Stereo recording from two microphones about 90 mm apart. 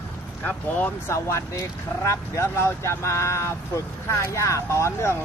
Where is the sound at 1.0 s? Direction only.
30° left (ahead or behind).